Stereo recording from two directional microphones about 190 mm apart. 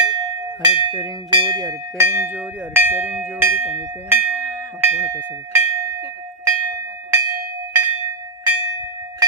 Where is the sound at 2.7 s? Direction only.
10° right (ahead or behind).